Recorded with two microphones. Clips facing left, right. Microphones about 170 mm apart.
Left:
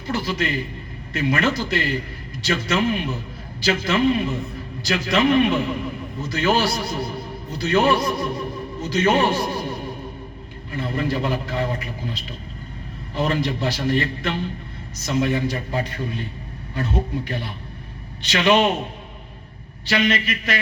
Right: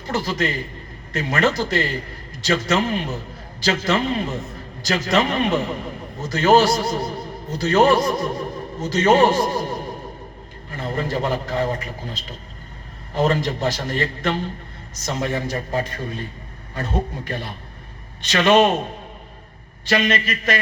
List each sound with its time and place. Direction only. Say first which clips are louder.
0.1 s a man's voice: right 1 dB; 45° right (ahead or behind)
13.1 s a man's voice: right 2 dB; 45° right (ahead or behind)
19.8 s a man's voice: right 1 dB; 45° right (ahead or behind)